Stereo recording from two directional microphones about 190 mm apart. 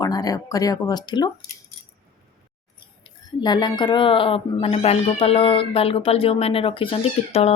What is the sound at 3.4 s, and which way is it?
Speech, 20° left (ahead or behind).